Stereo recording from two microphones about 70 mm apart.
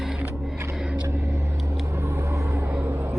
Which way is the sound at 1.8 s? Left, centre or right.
Right.